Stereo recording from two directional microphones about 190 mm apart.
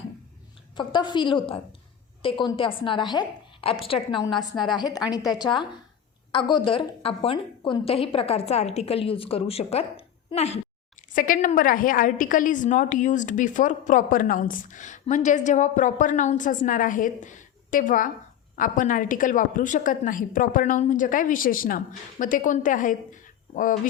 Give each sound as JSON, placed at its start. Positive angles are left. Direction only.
{"t": 0.8, "sound": "a woman's voice", "side_deg": 25}
{"t": 11.1, "sound": "a woman's voice", "side_deg": 45}